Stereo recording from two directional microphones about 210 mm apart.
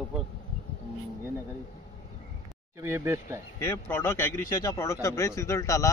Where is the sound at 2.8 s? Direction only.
15° right (ahead or behind).